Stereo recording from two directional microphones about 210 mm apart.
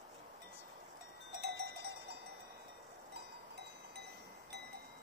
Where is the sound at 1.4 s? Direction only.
50° right (ahead or behind).